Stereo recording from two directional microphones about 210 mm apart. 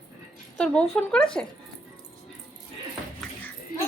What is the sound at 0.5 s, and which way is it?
Speech, 5° left (ahead or behind).